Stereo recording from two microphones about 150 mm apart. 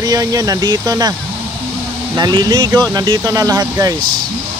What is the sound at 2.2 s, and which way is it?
Speech, 30° right (ahead or behind).